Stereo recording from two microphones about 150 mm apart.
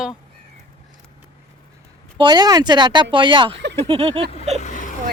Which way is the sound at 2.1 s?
30° right (ahead or behind).